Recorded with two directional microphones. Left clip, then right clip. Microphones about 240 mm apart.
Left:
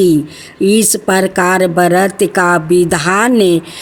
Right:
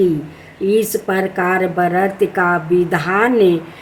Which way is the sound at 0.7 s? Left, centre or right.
Left.